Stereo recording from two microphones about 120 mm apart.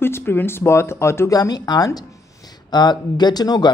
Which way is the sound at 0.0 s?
20° left (ahead or behind).